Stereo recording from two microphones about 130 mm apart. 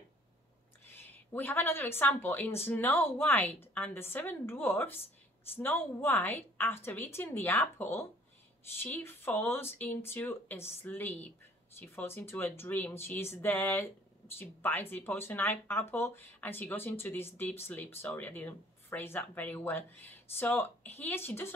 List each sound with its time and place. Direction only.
0.8 s speech: 15° left (ahead or behind)